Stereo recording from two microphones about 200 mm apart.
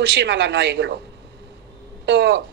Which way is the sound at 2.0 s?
60° right (ahead or behind).